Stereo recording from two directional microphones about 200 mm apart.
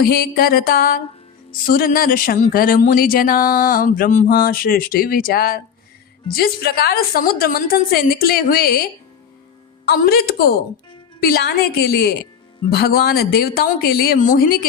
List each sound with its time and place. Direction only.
0.0 s speech: 50° left (ahead or behind)